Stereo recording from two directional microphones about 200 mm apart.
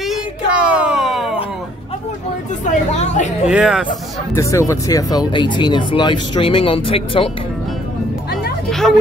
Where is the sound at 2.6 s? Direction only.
35° left (ahead or behind).